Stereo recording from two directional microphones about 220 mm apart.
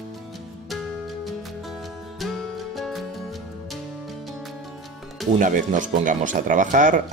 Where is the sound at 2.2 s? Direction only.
Centre (ahead or behind).